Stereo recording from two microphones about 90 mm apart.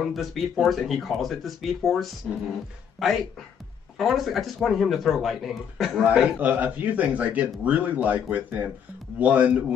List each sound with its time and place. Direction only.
0.1 s speech: centre (ahead or behind)
6.3 s speech: 20° right (ahead or behind)